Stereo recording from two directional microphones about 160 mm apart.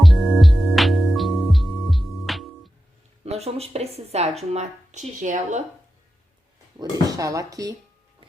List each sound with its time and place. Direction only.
0.0 s music: centre (ahead or behind)
3.2 s a woman's voice: 40° right (ahead or behind)
6.7 s speech: 20° right (ahead or behind)